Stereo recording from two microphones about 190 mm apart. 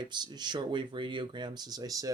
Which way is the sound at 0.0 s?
25° right (ahead or behind).